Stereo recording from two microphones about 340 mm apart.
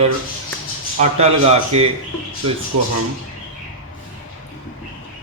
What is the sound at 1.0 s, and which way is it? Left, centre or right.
Speech, centre.